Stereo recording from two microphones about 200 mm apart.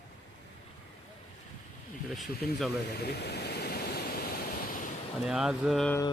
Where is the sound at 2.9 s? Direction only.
55° left (ahead or behind).